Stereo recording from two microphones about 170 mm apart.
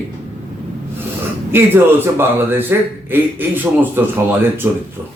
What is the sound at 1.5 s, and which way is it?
Speech, 15° right (ahead or behind).